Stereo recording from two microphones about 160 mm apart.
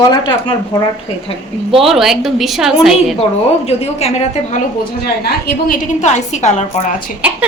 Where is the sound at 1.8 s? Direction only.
Centre (ahead or behind).